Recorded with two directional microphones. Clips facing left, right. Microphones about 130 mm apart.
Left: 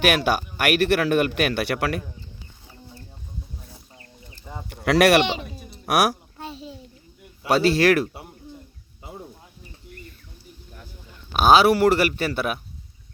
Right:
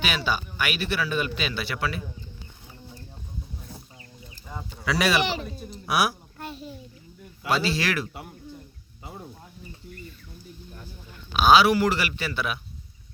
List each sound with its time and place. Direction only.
0.3 s a man's voice: 70° left (ahead or behind)
4.7 s speech: 65° left (ahead or behind)
5.2 s speech: 20° left (ahead or behind)
5.7 s a sound: 70° left (ahead or behind)
7.5 s speech: 55° left (ahead or behind)
8.0 s speech: 30° left (ahead or behind)
11.3 s speech: 45° left (ahead or behind)